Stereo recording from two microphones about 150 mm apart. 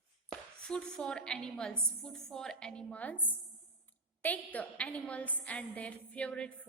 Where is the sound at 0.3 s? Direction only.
5° left (ahead or behind).